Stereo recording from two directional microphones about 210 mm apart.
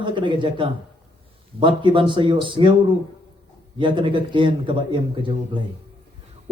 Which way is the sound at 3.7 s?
25° right (ahead or behind).